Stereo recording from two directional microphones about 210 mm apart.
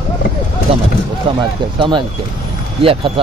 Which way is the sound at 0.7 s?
25° right (ahead or behind).